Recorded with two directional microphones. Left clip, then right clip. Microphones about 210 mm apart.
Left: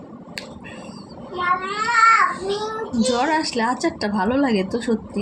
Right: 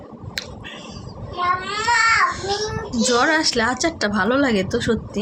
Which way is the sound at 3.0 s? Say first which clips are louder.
Right 3 dB; 10° right (ahead or behind).